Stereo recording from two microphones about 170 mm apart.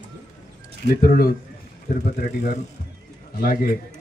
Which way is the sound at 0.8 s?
60° left (ahead or behind).